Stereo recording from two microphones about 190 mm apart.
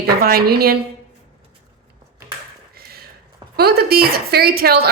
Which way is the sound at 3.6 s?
55° right (ahead or behind).